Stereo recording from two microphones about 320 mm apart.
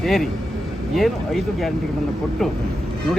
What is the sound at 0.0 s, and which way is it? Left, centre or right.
A man's voice, centre.